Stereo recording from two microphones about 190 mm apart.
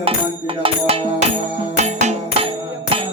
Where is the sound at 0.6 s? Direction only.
30° right (ahead or behind).